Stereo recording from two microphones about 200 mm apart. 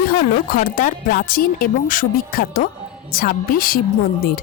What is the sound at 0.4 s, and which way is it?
A woman's voice, 45° left (ahead or behind).